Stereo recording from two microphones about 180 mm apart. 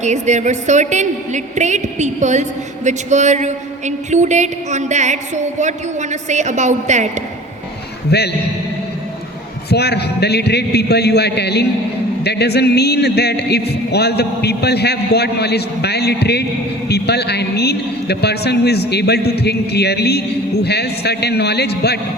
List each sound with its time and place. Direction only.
0.0 s a woman's voice: 40° right (ahead or behind)
8.1 s a man's voice: 65° left (ahead or behind)
9.6 s a man's voice: 65° left (ahead or behind)